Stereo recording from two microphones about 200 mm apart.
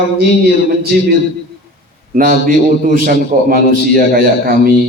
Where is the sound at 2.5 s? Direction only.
45° right (ahead or behind).